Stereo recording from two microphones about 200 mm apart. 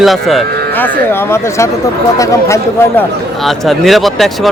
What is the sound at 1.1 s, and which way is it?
Speech, 15° left (ahead or behind).